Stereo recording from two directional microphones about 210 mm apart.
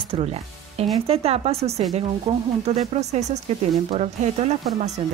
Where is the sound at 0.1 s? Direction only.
30° right (ahead or behind).